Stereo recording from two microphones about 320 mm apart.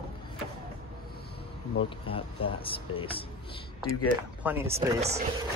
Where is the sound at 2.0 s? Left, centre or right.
Centre.